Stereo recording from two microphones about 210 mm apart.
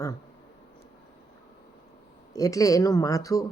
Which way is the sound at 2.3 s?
15° left (ahead or behind).